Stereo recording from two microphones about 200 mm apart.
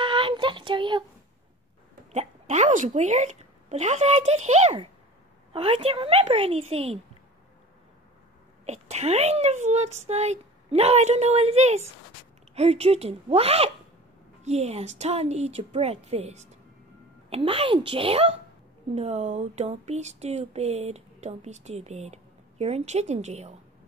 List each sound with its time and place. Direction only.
0.0 s a sound: 25° right (ahead or behind)
2.1 s a woman's voice: 35° right (ahead or behind)
8.6 s a woman's voice: 35° right (ahead or behind)